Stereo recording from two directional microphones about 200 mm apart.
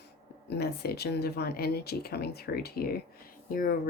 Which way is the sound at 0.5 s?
55° left (ahead or behind).